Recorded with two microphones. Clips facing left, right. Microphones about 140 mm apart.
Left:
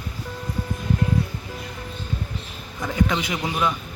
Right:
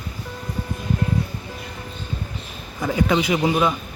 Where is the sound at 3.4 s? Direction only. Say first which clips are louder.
Right 5 dB; 20° right (ahead or behind).